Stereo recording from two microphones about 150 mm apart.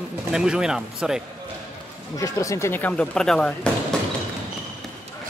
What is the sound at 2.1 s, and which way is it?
Speech, 20° left (ahead or behind).